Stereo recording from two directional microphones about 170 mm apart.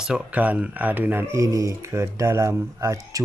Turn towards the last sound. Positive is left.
turn(degrees=-15)  # may be behind; listen again after turning